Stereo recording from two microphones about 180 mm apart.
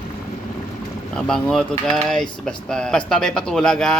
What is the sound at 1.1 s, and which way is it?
Speech, 5° left (ahead or behind).